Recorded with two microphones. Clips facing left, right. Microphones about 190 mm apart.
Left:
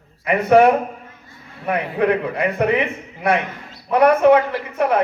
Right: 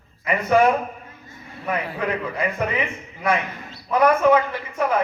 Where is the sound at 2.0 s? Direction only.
65° left (ahead or behind).